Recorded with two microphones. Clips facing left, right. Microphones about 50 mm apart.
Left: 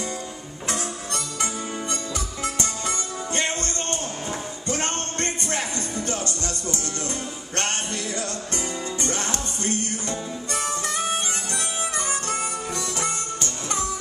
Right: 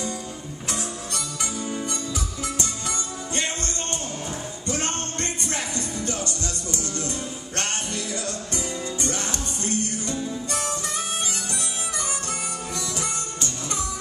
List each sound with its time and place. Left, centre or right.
0.7 s music: left
3.3 s music: left
8.5 s music: left
12.1 s music: left